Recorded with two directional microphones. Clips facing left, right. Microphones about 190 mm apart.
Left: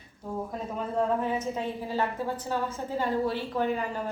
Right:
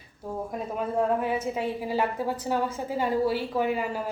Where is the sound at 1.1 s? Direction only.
10° right (ahead or behind).